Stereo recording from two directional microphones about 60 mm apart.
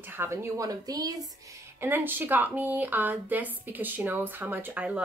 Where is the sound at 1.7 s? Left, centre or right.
Right.